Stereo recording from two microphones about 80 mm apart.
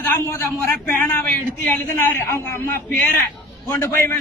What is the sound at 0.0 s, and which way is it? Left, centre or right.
A man's voice, left.